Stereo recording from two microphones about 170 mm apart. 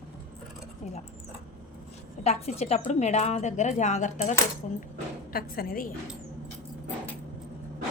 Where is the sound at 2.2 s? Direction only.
40° left (ahead or behind).